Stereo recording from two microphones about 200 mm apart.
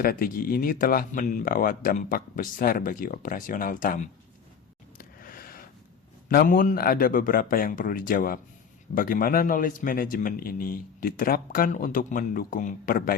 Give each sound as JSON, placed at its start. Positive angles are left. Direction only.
{"t": 0.0, "sound": "a man's voice", "side_deg": 45}
{"t": 4.9, "sound": "a sound", "side_deg": 45}
{"t": 6.2, "sound": "a man's voice", "side_deg": 45}